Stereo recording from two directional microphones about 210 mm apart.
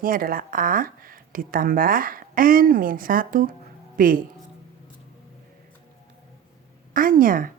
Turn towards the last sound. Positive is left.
turn(degrees=-40)  # may be behind; listen again after turning